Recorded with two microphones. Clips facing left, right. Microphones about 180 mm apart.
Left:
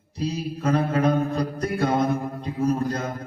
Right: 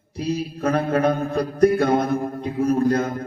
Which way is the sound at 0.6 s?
60° right (ahead or behind).